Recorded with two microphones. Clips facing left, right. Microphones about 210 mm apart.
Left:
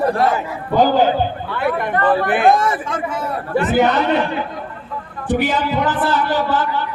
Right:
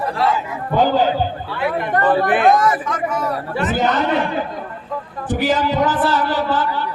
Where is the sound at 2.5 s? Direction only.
30° left (ahead or behind).